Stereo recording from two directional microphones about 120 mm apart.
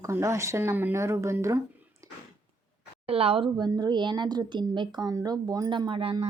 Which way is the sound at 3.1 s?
55° right (ahead or behind).